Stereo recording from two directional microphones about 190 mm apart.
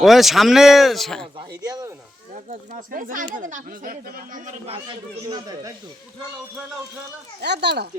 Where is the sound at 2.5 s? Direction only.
45° right (ahead or behind).